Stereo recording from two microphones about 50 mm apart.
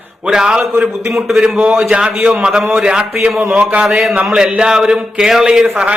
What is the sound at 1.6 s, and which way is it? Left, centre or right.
A man's voice, right.